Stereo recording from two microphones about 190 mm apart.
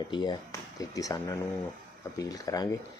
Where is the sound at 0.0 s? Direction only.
20° left (ahead or behind).